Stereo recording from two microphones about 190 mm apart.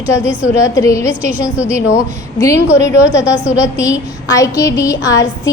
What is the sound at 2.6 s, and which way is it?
Speech, 70° left (ahead or behind).